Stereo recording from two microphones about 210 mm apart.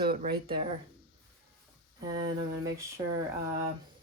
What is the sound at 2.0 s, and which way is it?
Speech, 20° right (ahead or behind).